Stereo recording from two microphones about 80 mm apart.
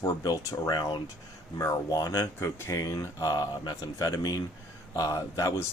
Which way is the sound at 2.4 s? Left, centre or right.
Left.